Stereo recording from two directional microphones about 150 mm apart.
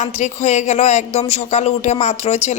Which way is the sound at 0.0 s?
50° left (ahead or behind).